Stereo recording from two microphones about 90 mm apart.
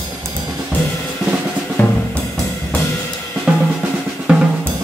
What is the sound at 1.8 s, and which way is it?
Drum, 20° left (ahead or behind).